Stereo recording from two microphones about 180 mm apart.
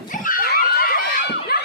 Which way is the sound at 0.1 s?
50° left (ahead or behind).